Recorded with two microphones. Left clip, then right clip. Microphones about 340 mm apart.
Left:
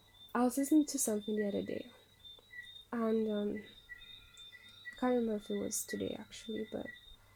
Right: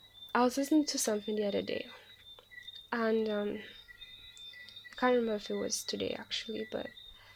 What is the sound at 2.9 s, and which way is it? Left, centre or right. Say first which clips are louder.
Speech: right 3 dB; right.